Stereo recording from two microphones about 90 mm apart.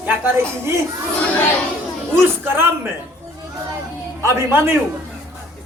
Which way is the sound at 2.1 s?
25° right (ahead or behind).